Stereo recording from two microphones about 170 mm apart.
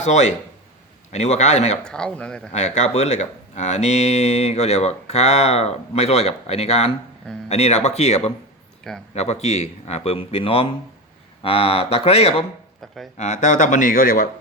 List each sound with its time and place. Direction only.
0.0 s speech: 45° left (ahead or behind)
1.8 s speech: 5° left (ahead or behind)
2.5 s speech: 40° left (ahead or behind)